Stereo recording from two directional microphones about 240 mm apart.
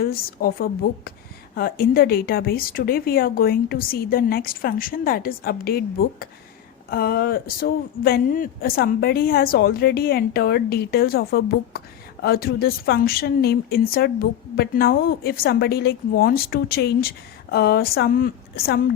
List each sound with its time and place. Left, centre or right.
0.0 s a woman's voice: left